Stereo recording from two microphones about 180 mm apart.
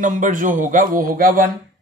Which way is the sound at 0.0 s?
45° right (ahead or behind).